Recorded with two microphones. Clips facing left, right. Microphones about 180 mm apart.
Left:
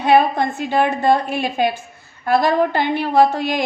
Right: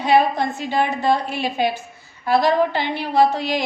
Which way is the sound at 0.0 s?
55° left (ahead or behind).